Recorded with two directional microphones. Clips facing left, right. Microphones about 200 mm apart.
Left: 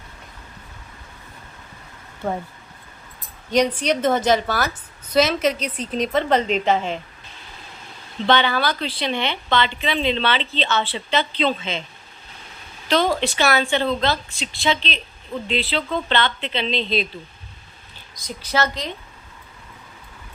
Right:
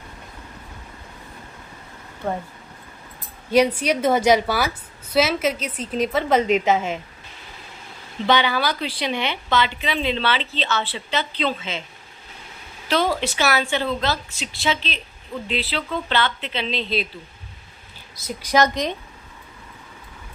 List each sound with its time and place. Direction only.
3.5 s speech: 10° right (ahead or behind)
8.3 s speech: 10° right (ahead or behind)
12.9 s speech: 10° right (ahead or behind)
18.3 s speech: 15° right (ahead or behind)